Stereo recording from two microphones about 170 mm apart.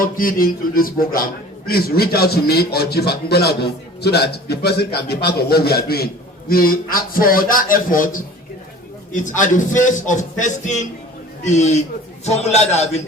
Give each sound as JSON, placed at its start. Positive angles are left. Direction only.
{"t": 0.0, "sound": "a man's voice", "side_deg": 55}